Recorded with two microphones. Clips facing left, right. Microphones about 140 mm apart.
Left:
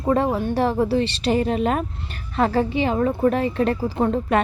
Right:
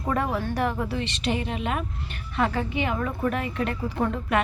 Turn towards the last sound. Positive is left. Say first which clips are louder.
# left 5 dB
turn(degrees=35)  # may be behind; listen again after turning